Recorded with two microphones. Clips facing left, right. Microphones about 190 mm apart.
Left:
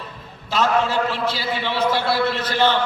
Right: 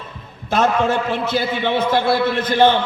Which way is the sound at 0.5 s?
55° right (ahead or behind).